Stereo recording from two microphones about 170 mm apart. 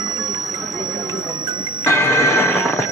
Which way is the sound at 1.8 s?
15° left (ahead or behind).